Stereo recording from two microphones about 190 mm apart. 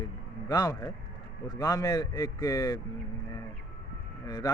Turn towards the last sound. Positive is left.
turn(degrees=20)  # may be behind; listen again after turning